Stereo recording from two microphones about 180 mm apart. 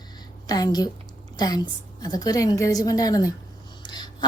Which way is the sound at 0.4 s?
20° left (ahead or behind).